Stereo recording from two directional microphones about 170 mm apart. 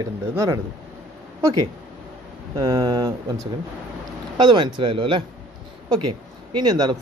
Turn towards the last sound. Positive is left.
turn(degrees=-25)  # may be behind; listen again after turning